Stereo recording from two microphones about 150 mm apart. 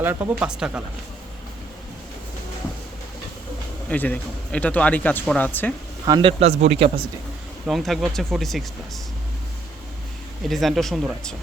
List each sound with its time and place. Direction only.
0.0 s speech: 15° right (ahead or behind)
3.8 s speech: 10° left (ahead or behind)
6.1 s speech: 30° right (ahead or behind)
6.4 s speech: 45° right (ahead or behind)
7.7 s speech: centre (ahead or behind)
10.5 s speech: centre (ahead or behind)